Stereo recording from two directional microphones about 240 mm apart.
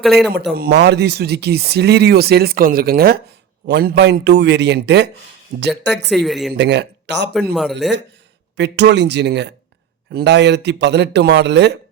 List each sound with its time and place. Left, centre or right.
0.0 s a woman's voice: centre
0.5 s a man's voice: right
6.1 s a woman's voice: centre
6.6 s speech: right
7.5 s a woman's voice: centre
7.8 s a man's voice: right